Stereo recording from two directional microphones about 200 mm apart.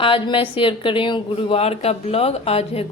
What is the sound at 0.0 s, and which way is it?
A woman's voice, 25° left (ahead or behind).